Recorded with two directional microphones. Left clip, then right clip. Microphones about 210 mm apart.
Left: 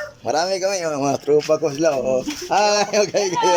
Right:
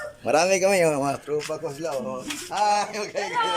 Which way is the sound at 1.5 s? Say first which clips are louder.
Left 11 dB; 40° left (ahead or behind).